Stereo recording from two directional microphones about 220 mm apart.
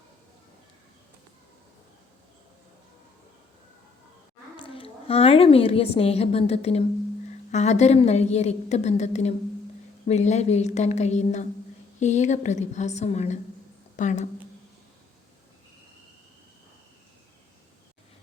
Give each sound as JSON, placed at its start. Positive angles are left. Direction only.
{"t": 4.5, "sound": "a woman's voice", "side_deg": 25}